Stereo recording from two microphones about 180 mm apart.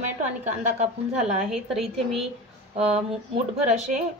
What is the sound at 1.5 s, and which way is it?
Speech, centre (ahead or behind).